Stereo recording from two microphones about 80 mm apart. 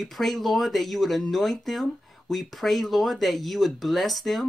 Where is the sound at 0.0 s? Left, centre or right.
Centre.